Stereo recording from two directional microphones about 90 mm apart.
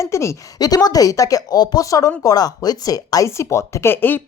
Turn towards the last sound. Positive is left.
turn(degrees=25)  # may be behind; listen again after turning